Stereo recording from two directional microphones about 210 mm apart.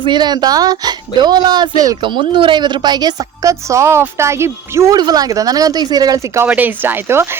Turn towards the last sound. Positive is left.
turn(degrees=-10)  # may be behind; listen again after turning